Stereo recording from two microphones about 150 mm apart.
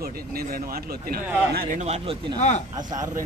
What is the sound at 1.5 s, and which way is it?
Speech, 55° right (ahead or behind).